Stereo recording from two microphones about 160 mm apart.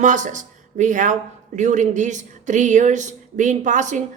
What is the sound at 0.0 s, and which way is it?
Speech, 50° right (ahead or behind).